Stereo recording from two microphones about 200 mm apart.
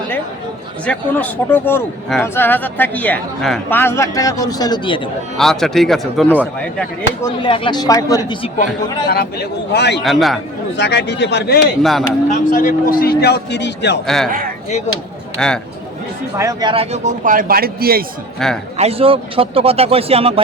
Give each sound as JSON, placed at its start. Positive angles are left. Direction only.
{"t": 0.9, "sound": "speech", "side_deg": 10}
{"t": 5.4, "sound": "a man's voice", "side_deg": 0}
{"t": 7.4, "sound": "speech", "side_deg": 25}
{"t": 9.0, "sound": "speech", "side_deg": 50}
{"t": 10.0, "sound": "a man's voice", "side_deg": 0}
{"t": 10.8, "sound": "speech", "side_deg": 55}
{"t": 11.8, "sound": "a man's voice", "side_deg": 0}
{"t": 12.3, "sound": "a man's voice", "side_deg": 40}
{"t": 14.3, "sound": "speech", "side_deg": -45}
{"t": 15.4, "sound": "a man's voice", "side_deg": 5}
{"t": 16.4, "sound": "speech", "side_deg": -20}
{"t": 18.4, "sound": "a man's voice", "side_deg": 0}
{"t": 18.8, "sound": "speech", "side_deg": -30}